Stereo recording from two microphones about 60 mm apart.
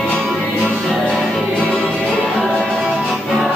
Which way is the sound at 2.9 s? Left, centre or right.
Centre.